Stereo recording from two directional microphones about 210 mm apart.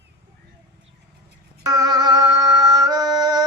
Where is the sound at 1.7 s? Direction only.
20° right (ahead or behind).